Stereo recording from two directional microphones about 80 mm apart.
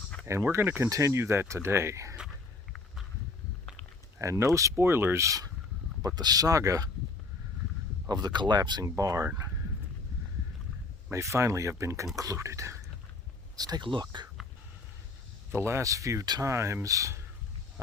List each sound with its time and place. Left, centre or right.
0.3 s speech: right
4.2 s speech: right
6.0 s speech: right
8.0 s speech: right
8.8 s speech: right
11.1 s speech: right
13.6 s speech: right
13.8 s speech: right
15.5 s speech: right